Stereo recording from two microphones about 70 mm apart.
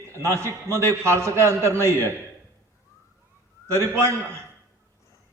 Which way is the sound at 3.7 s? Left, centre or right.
Right.